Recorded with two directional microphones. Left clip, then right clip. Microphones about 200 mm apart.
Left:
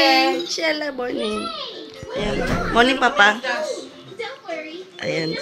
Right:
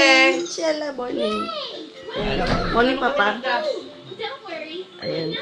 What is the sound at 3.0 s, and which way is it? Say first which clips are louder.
Speech: left 5 dB; 5° left (ahead or behind).